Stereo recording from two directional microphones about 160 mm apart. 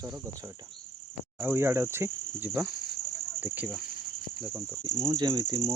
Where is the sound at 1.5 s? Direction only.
15° right (ahead or behind).